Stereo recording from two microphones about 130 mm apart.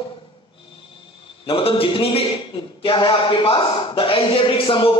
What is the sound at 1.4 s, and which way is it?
A man's voice, 45° left (ahead or behind).